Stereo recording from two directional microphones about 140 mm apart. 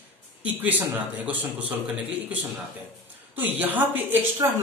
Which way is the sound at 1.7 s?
10° right (ahead or behind).